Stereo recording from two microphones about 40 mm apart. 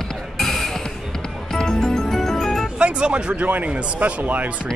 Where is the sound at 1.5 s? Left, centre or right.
Centre.